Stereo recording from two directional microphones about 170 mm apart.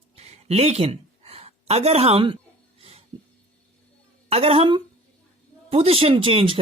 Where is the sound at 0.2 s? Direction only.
40° right (ahead or behind).